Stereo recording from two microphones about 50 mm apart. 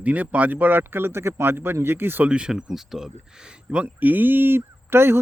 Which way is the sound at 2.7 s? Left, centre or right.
Centre.